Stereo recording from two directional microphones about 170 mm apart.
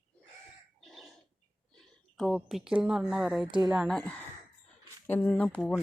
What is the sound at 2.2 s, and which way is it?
Speech, centre (ahead or behind).